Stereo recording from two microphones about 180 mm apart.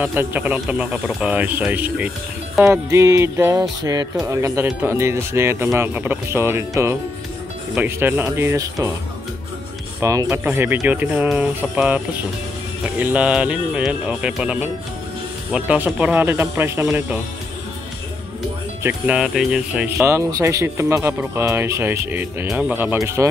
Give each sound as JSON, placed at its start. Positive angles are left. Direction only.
{"t": 0.0, "sound": "speech", "side_deg": -10}
{"t": 9.9, "sound": "speech", "side_deg": -15}
{"t": 13.0, "sound": "speech", "side_deg": -5}
{"t": 18.8, "sound": "speech", "side_deg": -10}